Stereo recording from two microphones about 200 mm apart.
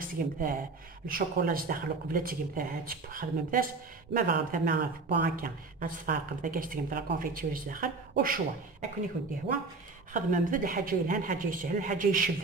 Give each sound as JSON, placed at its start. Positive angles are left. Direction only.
{"t": 0.0, "sound": "speech", "side_deg": -45}
{"t": 10.1, "sound": "speech", "side_deg": -40}